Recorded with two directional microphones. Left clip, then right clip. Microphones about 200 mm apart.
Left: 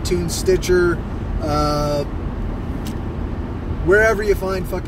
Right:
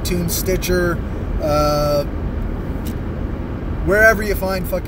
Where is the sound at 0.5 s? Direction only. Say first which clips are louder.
Left 3 dB; 15° right (ahead or behind).